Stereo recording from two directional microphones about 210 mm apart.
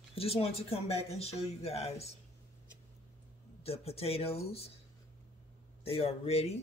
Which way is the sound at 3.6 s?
30° left (ahead or behind).